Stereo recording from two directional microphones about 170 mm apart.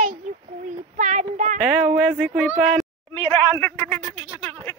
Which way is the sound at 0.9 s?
45° right (ahead or behind).